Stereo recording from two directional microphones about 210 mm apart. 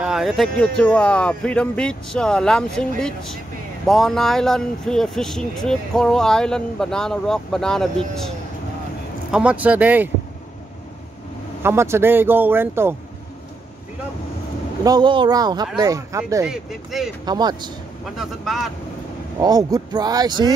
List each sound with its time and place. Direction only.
0.0 s speech: centre (ahead or behind)
9.3 s speech: 5° right (ahead or behind)
11.6 s speech: 10° right (ahead or behind)
14.8 s speech: 20° right (ahead or behind)
16.4 s speech: centre (ahead or behind)
17.2 s speech: 20° right (ahead or behind)
18.1 s speech: centre (ahead or behind)
19.4 s speech: 20° right (ahead or behind)